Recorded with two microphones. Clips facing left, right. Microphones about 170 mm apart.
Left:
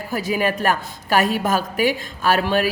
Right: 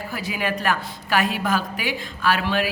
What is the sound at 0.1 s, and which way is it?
A woman's voice, 45° left (ahead or behind).